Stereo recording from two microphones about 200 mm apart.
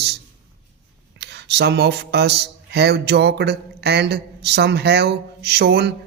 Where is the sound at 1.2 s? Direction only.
55° right (ahead or behind).